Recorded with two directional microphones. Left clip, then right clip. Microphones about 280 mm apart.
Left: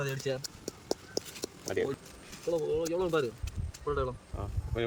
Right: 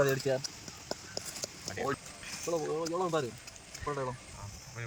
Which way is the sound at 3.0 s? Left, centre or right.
Centre.